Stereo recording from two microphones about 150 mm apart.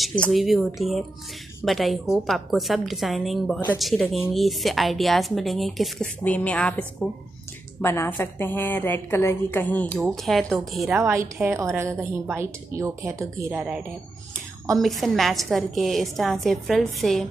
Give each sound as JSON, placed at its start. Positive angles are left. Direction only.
{"t": 0.0, "sound": "a woman's voice", "side_deg": 5}
{"t": 9.9, "sound": "a woman's voice", "side_deg": 0}
{"t": 11.0, "sound": "a woman's voice", "side_deg": -15}
{"t": 14.8, "sound": "a woman's voice", "side_deg": 0}